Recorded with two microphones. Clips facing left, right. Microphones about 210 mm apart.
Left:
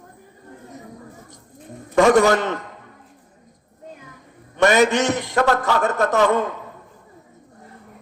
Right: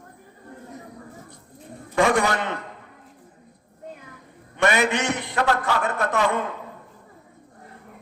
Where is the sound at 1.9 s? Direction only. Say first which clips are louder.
Left 6 dB; 45° left (ahead or behind).